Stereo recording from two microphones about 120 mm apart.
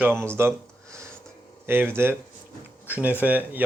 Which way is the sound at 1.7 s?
20° right (ahead or behind).